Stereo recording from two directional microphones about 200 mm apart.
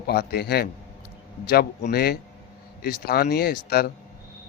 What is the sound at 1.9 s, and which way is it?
A man's voice, 50° left (ahead or behind).